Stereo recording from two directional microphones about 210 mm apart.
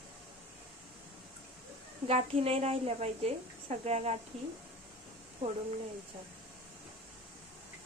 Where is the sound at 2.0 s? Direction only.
30° right (ahead or behind).